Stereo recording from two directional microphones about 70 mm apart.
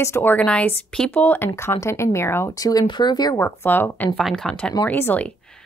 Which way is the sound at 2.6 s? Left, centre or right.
Left.